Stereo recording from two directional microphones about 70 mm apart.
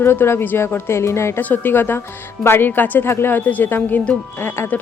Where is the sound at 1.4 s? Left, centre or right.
Left.